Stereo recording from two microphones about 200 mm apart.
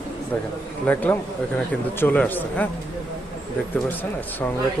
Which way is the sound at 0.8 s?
10° left (ahead or behind).